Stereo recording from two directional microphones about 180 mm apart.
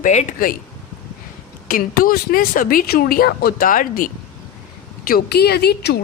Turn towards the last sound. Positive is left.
turn(degrees=65)  # may be behind; listen again after turning